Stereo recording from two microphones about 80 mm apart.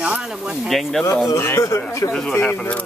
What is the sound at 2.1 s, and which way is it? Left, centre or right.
Speech, centre.